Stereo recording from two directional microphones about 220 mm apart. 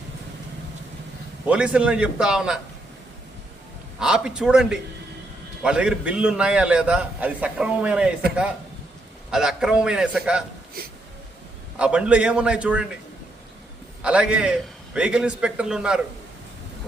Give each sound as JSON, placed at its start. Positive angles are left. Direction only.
{"t": 1.5, "sound": "a man's voice", "side_deg": -5}
{"t": 4.0, "sound": "a man's voice", "side_deg": -5}
{"t": 9.3, "sound": "a man's voice", "side_deg": 0}
{"t": 10.8, "sound": "speech", "side_deg": -45}
{"t": 11.8, "sound": "a man's voice", "side_deg": -5}
{"t": 14.0, "sound": "a man's voice", "side_deg": -5}